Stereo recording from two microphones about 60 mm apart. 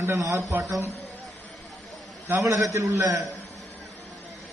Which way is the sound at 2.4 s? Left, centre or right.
Right.